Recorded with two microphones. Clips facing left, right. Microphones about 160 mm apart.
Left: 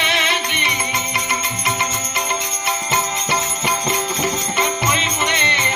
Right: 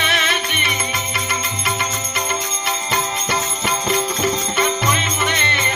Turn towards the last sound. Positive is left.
turn(degrees=20)  # may be behind; listen again after turning